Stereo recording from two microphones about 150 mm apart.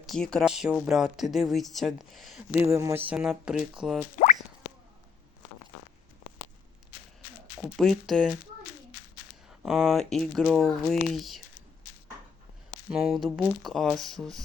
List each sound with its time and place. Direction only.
0.0 s speech: 5° left (ahead or behind)
2.6 s speech: 20° right (ahead or behind)
7.8 s speech: centre (ahead or behind)
9.5 s speech: 5° right (ahead or behind)
12.9 s speech: centre (ahead or behind)